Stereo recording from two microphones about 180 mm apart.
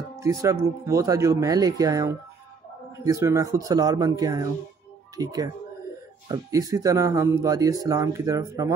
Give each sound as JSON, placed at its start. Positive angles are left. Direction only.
{"t": 0.1, "sound": "speech", "side_deg": -20}